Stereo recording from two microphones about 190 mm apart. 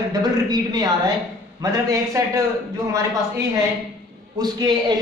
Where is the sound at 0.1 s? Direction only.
20° right (ahead or behind).